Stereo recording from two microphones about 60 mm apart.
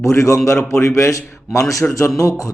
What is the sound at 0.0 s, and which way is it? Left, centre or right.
A man's voice, left.